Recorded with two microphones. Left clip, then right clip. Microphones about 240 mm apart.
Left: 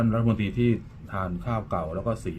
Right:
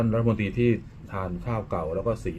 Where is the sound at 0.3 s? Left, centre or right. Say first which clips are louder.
Right 2 dB; left.